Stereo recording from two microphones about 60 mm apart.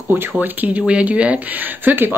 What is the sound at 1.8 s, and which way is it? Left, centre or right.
Speech, right.